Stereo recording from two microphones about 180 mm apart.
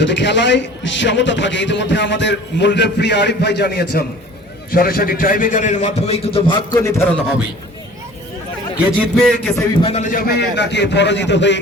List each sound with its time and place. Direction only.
0.0 s a man's voice: 80° left; by 6.7 s 30° left (ahead or behind)
6.7 s a man's voice: 15° left (ahead or behind)
9.0 s a man's voice: 5° left (ahead or behind)
9.7 s a man's voice: 35° left (ahead or behind)
10.3 s speech: 70° left (ahead or behind)